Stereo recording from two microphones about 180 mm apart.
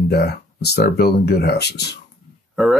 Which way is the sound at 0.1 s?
65° left (ahead or behind).